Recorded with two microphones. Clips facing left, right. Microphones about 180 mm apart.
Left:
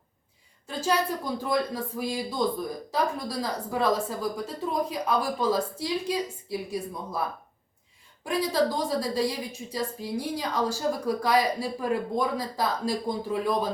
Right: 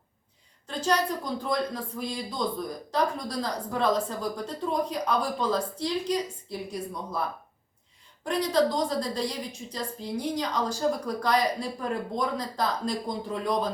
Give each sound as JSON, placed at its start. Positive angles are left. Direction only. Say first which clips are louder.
{"t": 0.7, "sound": "a woman's voice", "louder": "even", "side_deg": 5}
{"t": 8.3, "sound": "a woman's voice", "louder": "right 1 dB", "side_deg": 5}